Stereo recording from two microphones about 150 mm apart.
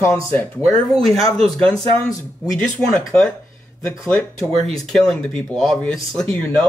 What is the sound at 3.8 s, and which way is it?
Speech, 20° left (ahead or behind).